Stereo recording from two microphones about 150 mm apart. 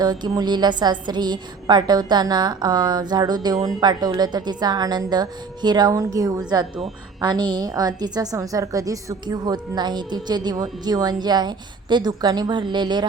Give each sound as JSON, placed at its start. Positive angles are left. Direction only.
{"t": 0.0, "sound": "a woman's voice", "side_deg": -25}